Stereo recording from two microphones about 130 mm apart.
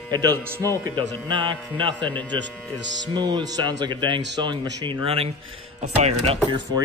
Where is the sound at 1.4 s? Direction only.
40° right (ahead or behind).